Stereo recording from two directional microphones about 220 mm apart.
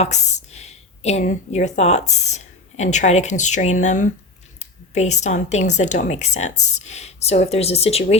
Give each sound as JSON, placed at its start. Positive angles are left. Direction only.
{"t": 0.0, "sound": "a woman's voice", "side_deg": 30}